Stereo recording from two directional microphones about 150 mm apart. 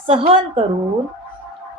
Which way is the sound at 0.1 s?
40° right (ahead or behind).